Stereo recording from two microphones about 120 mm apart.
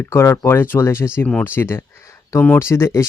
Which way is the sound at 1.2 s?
10° left (ahead or behind).